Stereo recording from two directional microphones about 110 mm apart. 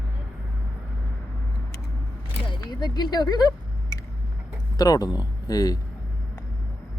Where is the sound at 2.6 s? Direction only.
40° left (ahead or behind).